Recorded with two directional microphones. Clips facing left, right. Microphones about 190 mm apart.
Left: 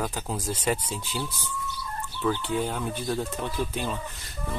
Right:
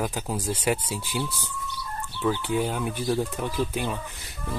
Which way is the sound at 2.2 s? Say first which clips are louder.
Right 2 dB; 10° right (ahead or behind).